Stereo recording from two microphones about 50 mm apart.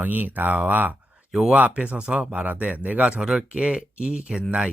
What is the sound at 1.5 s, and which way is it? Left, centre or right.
Speech, right.